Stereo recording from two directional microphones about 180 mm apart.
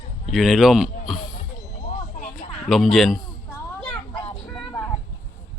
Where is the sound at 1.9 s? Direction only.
40° left (ahead or behind).